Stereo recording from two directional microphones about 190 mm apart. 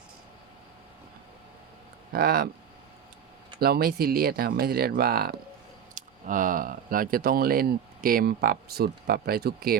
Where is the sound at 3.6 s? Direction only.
55° right (ahead or behind).